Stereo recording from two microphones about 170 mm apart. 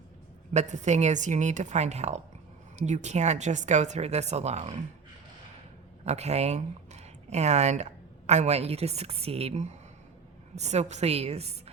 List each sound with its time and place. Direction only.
0.5 s a woman's voice: 45° right (ahead or behind)
6.1 s a woman's voice: 40° right (ahead or behind)